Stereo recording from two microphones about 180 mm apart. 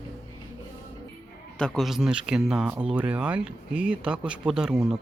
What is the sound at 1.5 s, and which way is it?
Speech, 5° left (ahead or behind).